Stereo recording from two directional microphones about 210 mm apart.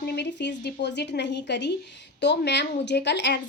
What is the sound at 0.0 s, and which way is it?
A woman's voice, 55° left (ahead or behind).